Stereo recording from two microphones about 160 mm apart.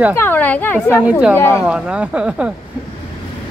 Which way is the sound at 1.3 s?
15° left (ahead or behind).